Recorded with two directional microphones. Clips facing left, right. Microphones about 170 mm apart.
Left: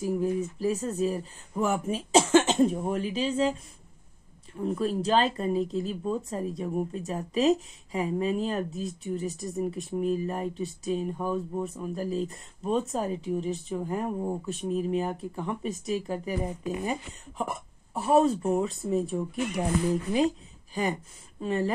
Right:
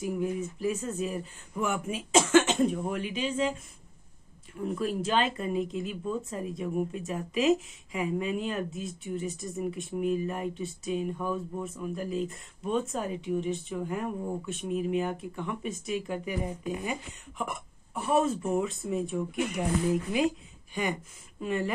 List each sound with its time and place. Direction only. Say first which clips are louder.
0.0 s speech: left 3 dB; 35° left (ahead or behind)
4.6 s a woman's voice: left 2 dB; 30° left (ahead or behind)